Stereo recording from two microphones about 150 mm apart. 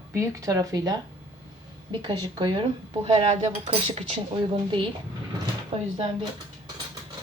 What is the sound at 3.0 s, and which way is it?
Speech, 40° right (ahead or behind).